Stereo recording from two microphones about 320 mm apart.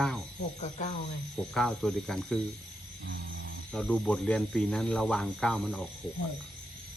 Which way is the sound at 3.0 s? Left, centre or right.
Right.